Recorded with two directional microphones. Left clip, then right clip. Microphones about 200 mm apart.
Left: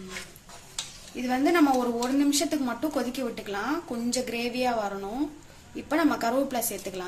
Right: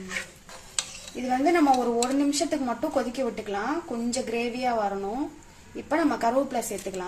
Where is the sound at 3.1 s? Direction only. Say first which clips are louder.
Right 3 dB; 15° right (ahead or behind).